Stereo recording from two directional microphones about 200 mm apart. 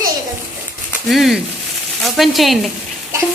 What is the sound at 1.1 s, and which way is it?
A man's voice, centre (ahead or behind).